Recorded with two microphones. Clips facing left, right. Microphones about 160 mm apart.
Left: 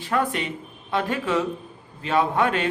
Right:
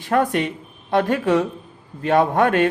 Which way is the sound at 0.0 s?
45° right (ahead or behind).